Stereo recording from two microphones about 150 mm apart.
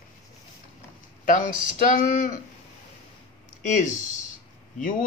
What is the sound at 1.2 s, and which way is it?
Speech, 60° left (ahead or behind).